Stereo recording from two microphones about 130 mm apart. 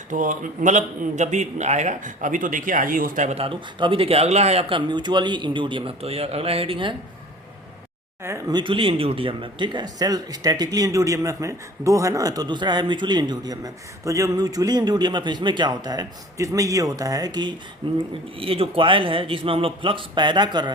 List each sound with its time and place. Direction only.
0.1 s a man's voice: 75° right (ahead or behind)
3.3 s speech: 45° right (ahead or behind)
4.7 s speech: 35° right (ahead or behind)
8.2 s speech: 20° right (ahead or behind)
8.5 s speech: 40° right (ahead or behind)
18.3 s speech: 45° right (ahead or behind)